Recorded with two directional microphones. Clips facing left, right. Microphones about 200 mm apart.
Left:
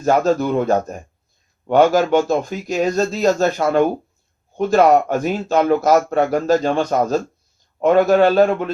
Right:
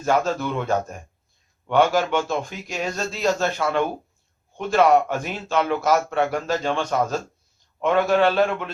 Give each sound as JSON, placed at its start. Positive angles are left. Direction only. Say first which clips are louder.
{"t": 0.0, "sound": "speech", "louder": "left 6 dB", "side_deg": 40}